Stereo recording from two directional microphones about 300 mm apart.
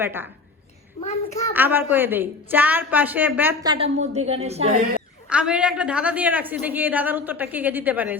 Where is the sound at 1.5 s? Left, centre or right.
Centre.